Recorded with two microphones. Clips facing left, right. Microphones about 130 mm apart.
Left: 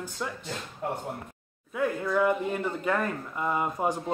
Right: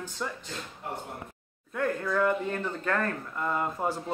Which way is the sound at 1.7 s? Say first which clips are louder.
Left 1 dB; 10° left (ahead or behind).